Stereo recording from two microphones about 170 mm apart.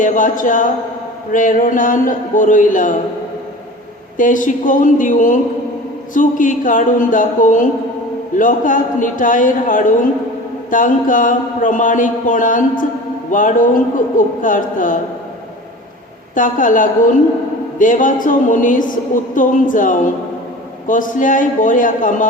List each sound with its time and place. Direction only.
0.0 s a woman's voice: 50° left (ahead or behind)
4.2 s a woman's voice: 50° left (ahead or behind)
16.3 s a woman's voice: 50° left (ahead or behind)